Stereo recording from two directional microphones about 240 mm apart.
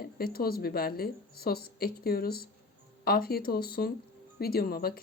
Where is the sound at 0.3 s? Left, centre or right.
Left.